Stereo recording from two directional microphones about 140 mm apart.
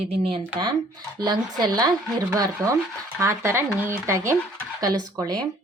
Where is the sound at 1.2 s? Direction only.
30° right (ahead or behind).